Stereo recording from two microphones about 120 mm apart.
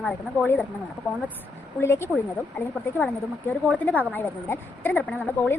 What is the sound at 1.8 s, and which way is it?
A woman's voice, 20° left (ahead or behind).